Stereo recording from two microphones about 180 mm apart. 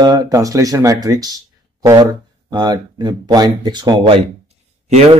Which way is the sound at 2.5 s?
25° right (ahead or behind).